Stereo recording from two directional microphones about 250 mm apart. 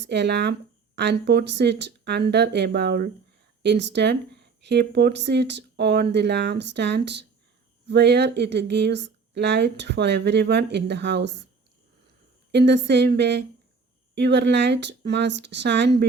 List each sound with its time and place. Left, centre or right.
0.0 s speech: right
12.5 s speech: right